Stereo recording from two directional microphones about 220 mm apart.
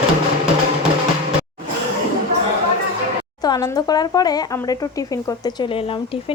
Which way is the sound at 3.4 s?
15° left (ahead or behind).